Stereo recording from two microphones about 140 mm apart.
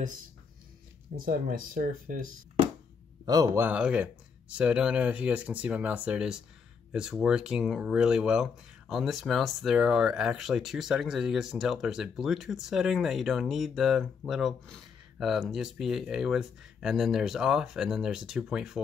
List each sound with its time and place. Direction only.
1.2 s speech: 90° right
3.3 s speech: 30° right (ahead or behind)
3.5 s speech: 10° right (ahead or behind)